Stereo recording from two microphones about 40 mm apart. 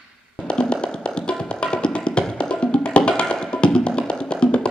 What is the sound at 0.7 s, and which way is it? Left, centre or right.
Music, left.